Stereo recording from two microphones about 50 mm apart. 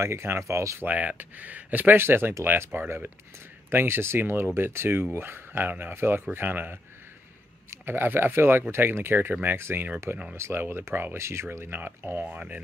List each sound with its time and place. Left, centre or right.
0.0 s speech: right
0.8 s speech: right
2.0 s speech: right
7.8 s speech: right
10.3 s speech: right
10.6 s speech: right
11.1 s speech: right
11.6 s speech: right